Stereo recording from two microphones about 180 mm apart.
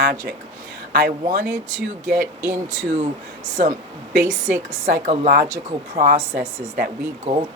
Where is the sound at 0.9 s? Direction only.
50° right (ahead or behind).